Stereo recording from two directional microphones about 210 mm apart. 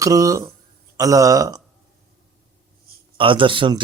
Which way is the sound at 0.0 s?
15° right (ahead or behind).